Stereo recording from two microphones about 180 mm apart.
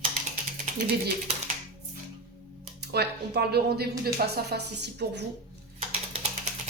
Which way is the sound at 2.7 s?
65° right (ahead or behind).